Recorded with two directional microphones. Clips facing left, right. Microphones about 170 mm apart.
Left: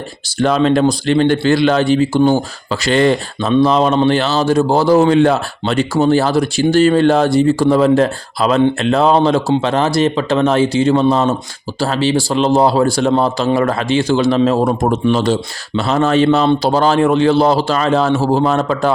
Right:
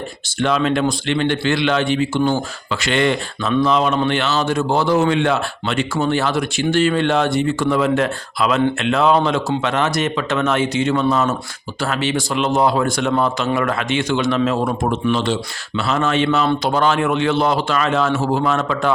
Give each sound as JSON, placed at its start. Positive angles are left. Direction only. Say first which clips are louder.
{"t": 0.3, "sound": "speech", "louder": "left 5 dB", "side_deg": 40}